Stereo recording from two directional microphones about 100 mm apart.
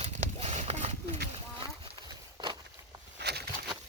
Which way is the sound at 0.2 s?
90° right.